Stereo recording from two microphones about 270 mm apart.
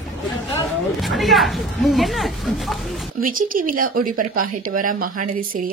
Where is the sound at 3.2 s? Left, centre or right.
Right.